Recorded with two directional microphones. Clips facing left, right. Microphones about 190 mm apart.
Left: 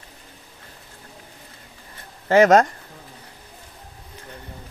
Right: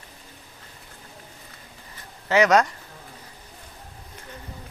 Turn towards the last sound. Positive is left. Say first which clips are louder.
# left 4 dB
turn(degrees=50)  # may be behind; listen again after turning